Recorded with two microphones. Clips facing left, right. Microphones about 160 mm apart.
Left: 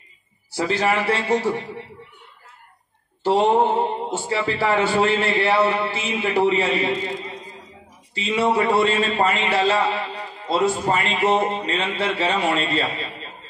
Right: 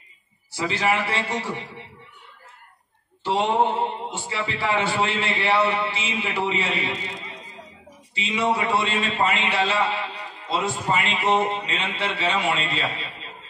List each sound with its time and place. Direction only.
0.6 s a man's voice: 40° left (ahead or behind)
3.3 s a man's voice: 40° left (ahead or behind)